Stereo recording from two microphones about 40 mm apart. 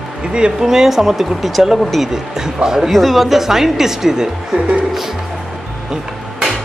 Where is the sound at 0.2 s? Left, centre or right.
Right.